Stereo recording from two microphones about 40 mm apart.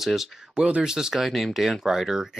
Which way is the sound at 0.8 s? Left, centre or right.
Centre.